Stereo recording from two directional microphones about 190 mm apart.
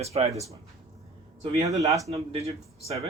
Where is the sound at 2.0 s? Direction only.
35° right (ahead or behind).